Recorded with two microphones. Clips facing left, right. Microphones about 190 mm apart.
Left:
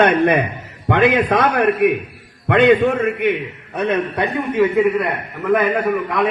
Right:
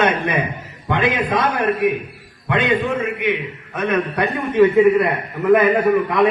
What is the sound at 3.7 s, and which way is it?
Speech, 35° left (ahead or behind).